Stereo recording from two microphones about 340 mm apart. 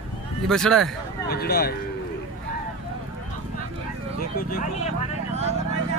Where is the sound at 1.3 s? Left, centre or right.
Left.